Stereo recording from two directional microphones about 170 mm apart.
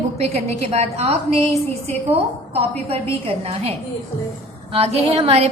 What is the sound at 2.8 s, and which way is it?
Speech, 35° right (ahead or behind).